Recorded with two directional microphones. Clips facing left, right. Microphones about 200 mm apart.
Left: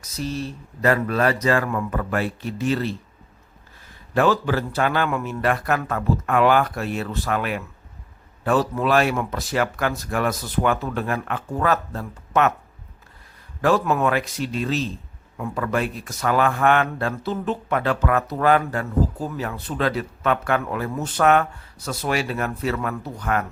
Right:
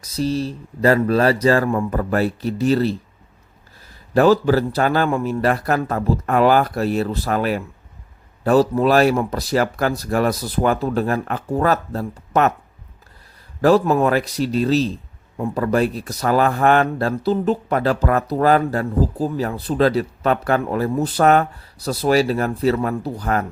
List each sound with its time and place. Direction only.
0.0 s a man's voice: 35° right (ahead or behind)
4.1 s a man's voice: 35° right (ahead or behind)
13.6 s a man's voice: 35° right (ahead or behind)